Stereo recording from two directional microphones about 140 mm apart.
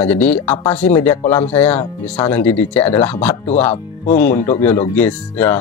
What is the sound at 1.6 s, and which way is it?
Speech, 40° left (ahead or behind).